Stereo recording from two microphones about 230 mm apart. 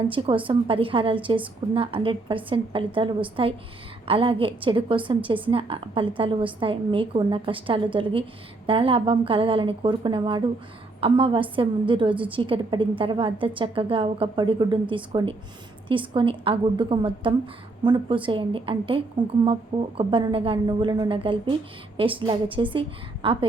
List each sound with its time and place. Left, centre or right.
0.1 s a woman's voice: right